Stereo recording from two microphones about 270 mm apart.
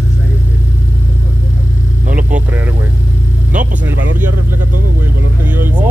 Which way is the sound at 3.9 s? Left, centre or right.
Right.